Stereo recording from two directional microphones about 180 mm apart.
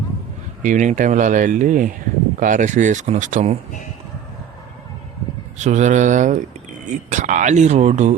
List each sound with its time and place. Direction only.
0.6 s speech: 45° right (ahead or behind)
5.5 s speech: 40° right (ahead or behind)